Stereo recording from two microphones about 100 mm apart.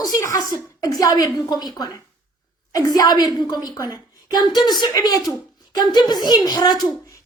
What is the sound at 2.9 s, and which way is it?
A woman's voice, 40° left (ahead or behind).